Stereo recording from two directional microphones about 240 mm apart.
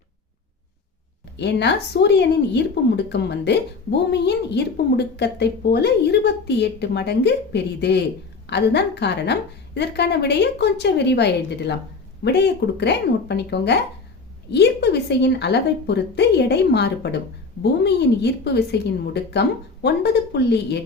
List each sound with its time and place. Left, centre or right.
1.4 s a woman's voice: left